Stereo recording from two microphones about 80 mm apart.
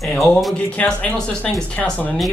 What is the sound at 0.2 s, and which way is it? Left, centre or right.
Speech, centre.